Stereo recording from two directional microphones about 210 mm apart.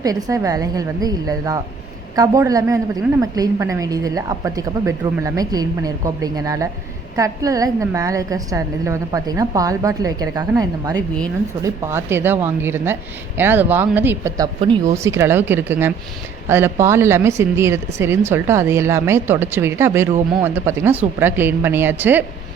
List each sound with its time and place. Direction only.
0.0 s a woman's voice: 15° right (ahead or behind)